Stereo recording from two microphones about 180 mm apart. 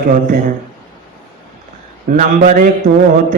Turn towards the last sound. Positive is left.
turn(degrees=-45)  # may be behind; listen again after turning